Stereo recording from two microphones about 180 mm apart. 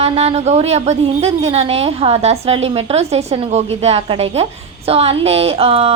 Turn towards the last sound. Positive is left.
turn(degrees=-35)  # may be behind; listen again after turning